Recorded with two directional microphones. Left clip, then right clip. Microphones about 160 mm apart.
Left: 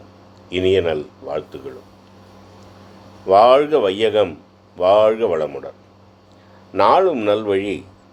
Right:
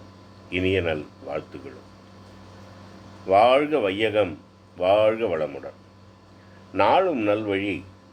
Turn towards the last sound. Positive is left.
turn(degrees=40)  # may be behind; listen again after turning